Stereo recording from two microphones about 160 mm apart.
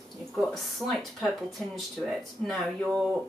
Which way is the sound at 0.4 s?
Centre (ahead or behind).